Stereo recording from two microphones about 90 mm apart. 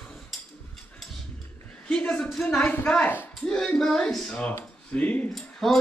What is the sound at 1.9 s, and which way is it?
A man's voice, 10° left (ahead or behind).